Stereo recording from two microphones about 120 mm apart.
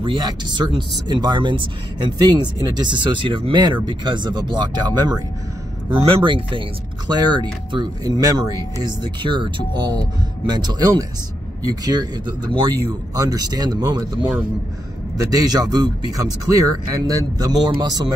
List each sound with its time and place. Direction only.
0.0 s speech: 35° right (ahead or behind)
6.0 s speech: 45° right (ahead or behind)